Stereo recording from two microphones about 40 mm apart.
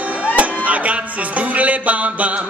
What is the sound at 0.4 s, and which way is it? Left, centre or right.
Music, right.